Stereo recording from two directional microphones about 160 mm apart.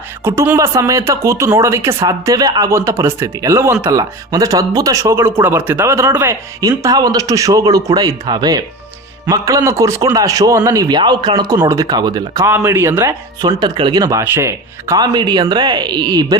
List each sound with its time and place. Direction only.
0.3 s speech: 15° right (ahead or behind)